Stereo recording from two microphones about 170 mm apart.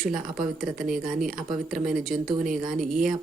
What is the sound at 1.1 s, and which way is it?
Speech, 50° right (ahead or behind).